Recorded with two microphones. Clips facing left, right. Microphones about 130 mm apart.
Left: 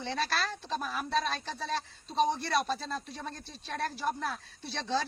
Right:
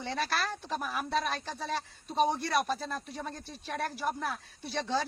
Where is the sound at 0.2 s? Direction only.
15° right (ahead or behind).